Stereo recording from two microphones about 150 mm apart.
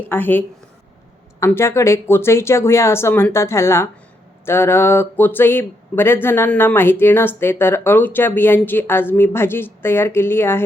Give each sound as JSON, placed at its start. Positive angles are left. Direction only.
{"t": 0.1, "sound": "speech", "side_deg": 15}